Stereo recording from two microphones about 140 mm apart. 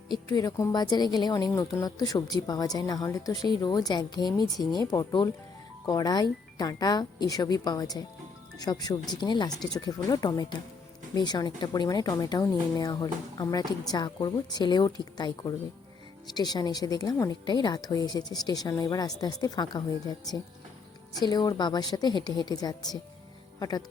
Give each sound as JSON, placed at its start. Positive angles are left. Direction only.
{"t": 0.1, "sound": "speech", "side_deg": 25}
{"t": 21.1, "sound": "speech", "side_deg": 30}